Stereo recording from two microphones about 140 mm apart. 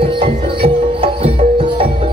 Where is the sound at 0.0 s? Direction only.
40° right (ahead or behind).